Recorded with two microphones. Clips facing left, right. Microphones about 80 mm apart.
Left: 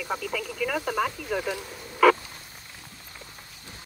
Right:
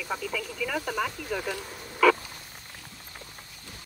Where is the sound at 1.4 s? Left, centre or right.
Left.